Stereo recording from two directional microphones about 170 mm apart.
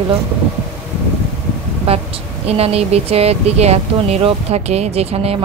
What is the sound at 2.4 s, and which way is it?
Speech, 35° right (ahead or behind).